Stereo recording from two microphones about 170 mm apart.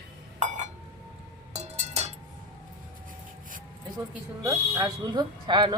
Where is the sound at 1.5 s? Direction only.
40° right (ahead or behind).